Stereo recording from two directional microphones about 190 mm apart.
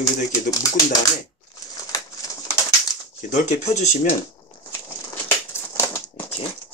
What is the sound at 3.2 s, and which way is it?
Speech, 40° left (ahead or behind).